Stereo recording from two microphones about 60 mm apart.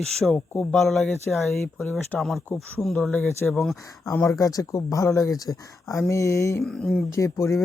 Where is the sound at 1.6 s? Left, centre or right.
Left.